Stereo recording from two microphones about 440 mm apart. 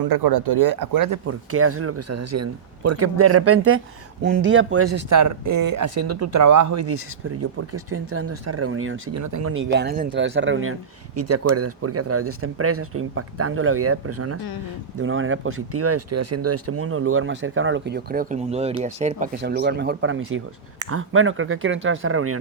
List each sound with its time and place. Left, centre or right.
0.0 s speech: right
1.3 s speech: right
5.8 s speech: right
9.2 s speech: right
9.5 s speech: right